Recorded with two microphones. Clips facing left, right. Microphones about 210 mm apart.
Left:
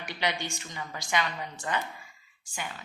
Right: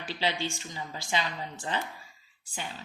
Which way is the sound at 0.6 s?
25° right (ahead or behind).